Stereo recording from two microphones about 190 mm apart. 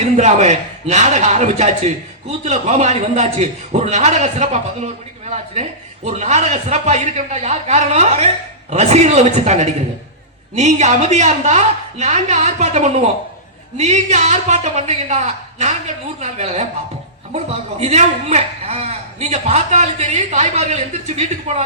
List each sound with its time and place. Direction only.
0.0 s a man's voice: 35° right (ahead or behind)